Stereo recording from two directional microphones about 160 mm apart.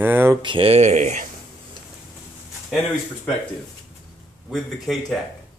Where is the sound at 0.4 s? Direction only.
30° right (ahead or behind).